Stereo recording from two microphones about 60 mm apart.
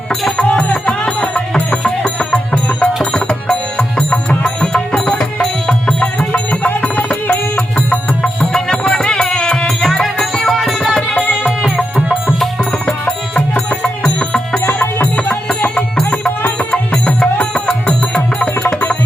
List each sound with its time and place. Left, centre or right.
0.3 s music: centre
12.8 s music: centre
14.8 s music: left